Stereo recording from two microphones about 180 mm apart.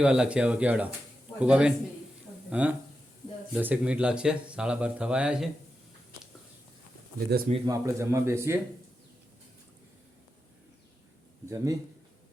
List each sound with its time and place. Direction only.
0.0 s speech: 5° right (ahead or behind)
7.5 s speech: 20° right (ahead or behind)
11.4 s speech: 15° right (ahead or behind)